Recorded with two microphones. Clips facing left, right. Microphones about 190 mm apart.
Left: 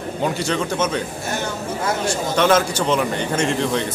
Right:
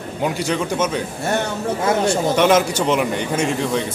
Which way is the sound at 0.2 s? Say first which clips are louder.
Right 1 dB; 10° right (ahead or behind).